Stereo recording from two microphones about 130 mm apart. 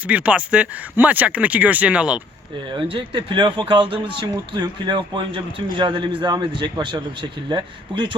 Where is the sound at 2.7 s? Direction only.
40° right (ahead or behind).